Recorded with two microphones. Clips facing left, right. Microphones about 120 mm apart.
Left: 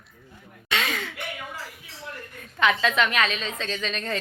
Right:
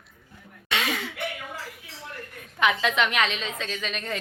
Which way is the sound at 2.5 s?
15° right (ahead or behind).